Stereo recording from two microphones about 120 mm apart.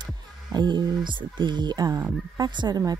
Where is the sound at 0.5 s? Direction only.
40° right (ahead or behind).